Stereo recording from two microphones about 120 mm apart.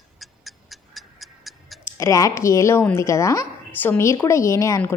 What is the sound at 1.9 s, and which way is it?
Speech, 25° left (ahead or behind).